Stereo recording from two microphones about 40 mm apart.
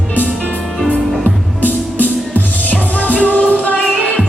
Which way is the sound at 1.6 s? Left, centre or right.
Left.